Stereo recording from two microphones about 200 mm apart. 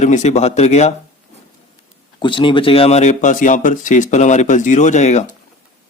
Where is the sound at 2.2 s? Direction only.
25° left (ahead or behind).